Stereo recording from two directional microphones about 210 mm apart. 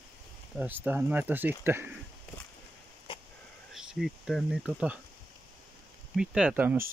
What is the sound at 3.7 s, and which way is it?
Speech, centre (ahead or behind).